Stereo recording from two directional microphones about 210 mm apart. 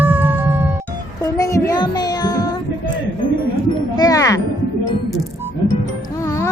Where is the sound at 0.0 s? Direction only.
10° right (ahead or behind).